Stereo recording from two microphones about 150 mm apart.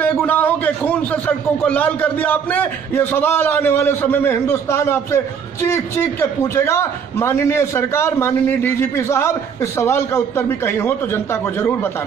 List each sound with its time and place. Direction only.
0.3 s a man's voice: 10° left (ahead or behind)